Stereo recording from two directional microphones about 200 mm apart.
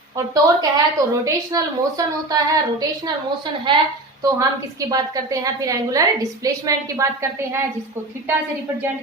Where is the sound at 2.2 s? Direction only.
20° right (ahead or behind).